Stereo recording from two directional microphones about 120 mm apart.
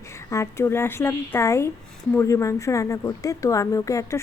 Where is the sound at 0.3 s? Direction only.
20° left (ahead or behind).